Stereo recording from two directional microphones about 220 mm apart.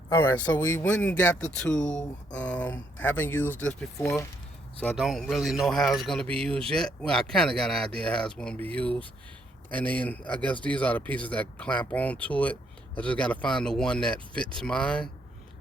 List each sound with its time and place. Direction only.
0.1 s a man's voice: 10° left (ahead or behind)